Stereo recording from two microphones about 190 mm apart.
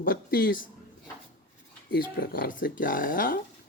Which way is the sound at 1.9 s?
55° left (ahead or behind).